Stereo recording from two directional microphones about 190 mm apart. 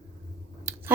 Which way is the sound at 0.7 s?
15° right (ahead or behind).